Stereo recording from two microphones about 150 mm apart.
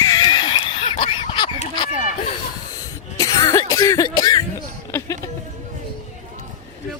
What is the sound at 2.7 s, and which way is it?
Cough, 25° left (ahead or behind).